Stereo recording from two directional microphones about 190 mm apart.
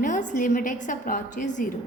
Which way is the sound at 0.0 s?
40° left (ahead or behind).